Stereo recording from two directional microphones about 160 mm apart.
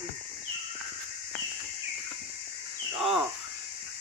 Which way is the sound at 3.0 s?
5° right (ahead or behind).